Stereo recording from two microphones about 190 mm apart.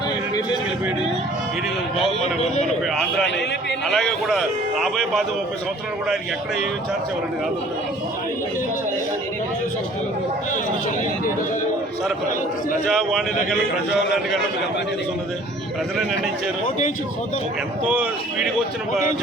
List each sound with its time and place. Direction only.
2.0 s speech: 35° left (ahead or behind)
3.8 s a man's voice: centre (ahead or behind)
12.9 s a man's voice: centre (ahead or behind)
17.8 s speech: 5° right (ahead or behind)